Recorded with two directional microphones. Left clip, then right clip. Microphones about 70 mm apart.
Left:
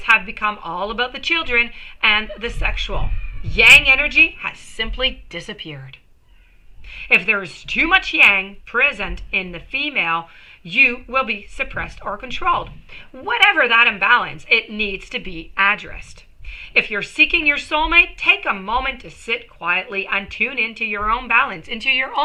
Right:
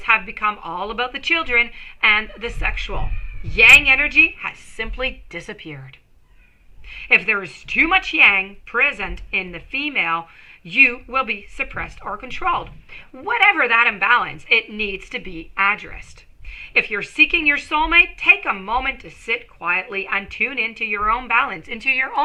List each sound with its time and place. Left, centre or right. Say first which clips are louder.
0.0 s a woman's voice: left 2 dB; right
6.9 s a woman's voice: left 1 dB; right
19.5 s a woman's voice: left 3 dB; right